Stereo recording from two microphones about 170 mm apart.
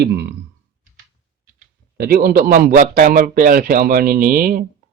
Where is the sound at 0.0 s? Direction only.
85° right.